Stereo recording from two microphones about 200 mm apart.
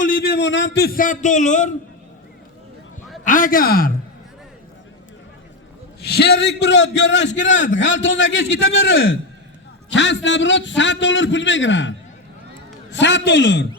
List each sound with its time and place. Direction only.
0.0 s a man's voice: 50° left (ahead or behind)
3.2 s a man's voice: 45° left (ahead or behind)
6.0 s a man's voice: 55° left (ahead or behind); by 9.0 s 75° left (ahead or behind)
9.9 s a man's voice: 65° left (ahead or behind)